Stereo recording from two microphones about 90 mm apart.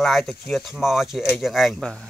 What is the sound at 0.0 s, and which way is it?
Speech, 5° left (ahead or behind).